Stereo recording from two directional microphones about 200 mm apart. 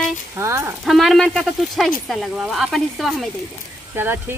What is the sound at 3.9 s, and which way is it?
Speech, 10° right (ahead or behind).